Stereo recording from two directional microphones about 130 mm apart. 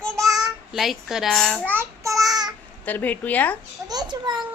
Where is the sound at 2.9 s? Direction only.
15° left (ahead or behind).